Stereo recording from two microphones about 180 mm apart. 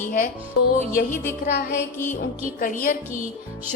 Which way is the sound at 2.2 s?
50° left (ahead or behind).